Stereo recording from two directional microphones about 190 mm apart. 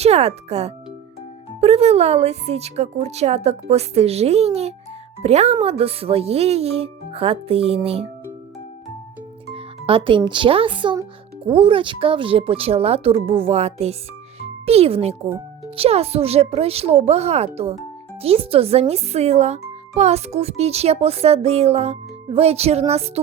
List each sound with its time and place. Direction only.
0.0 s a child's voice: 35° right (ahead or behind)
9.6 s a child's voice: 30° right (ahead or behind)